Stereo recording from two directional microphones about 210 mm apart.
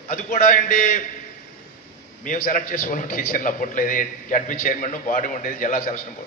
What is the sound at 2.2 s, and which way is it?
A man's voice, 40° left (ahead or behind).